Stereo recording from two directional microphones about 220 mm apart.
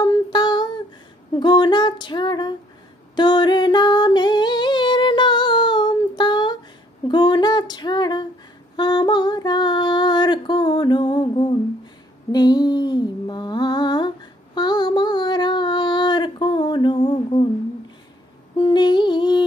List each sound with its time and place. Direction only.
0.0 s humming: 20° left (ahead or behind)
1.4 s female singing: 20° left (ahead or behind)
3.2 s singing: 20° left (ahead or behind)
7.1 s a sound: 20° left (ahead or behind)
8.7 s female singing: 20° left (ahead or behind)
11.8 s a sound: 20° left (ahead or behind)
18.6 s music: 20° left (ahead or behind)